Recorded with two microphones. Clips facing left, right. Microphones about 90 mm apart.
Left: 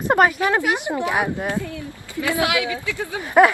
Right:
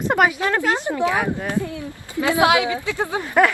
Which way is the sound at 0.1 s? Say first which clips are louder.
Left 2 dB; 5° right (ahead or behind).